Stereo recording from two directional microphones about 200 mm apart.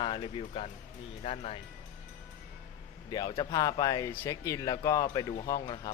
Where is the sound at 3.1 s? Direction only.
20° left (ahead or behind).